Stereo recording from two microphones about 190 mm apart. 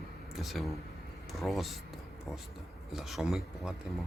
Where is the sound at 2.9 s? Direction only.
Centre (ahead or behind).